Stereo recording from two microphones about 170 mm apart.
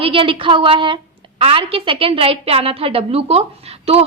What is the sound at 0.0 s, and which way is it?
A woman's voice, 30° right (ahead or behind).